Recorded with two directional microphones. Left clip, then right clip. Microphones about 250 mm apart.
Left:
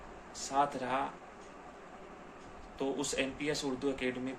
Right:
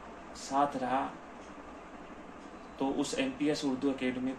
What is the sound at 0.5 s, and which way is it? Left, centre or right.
Speech, centre.